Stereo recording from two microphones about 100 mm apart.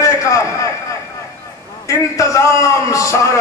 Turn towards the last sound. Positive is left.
turn(degrees=30)  # may be behind; listen again after turning